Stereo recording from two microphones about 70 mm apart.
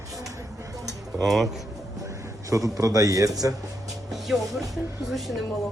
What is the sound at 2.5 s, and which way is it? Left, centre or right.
Speech, right.